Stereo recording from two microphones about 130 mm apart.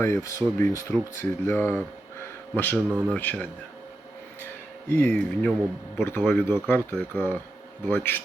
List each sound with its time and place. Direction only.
0.0 s speech: 20° left (ahead or behind)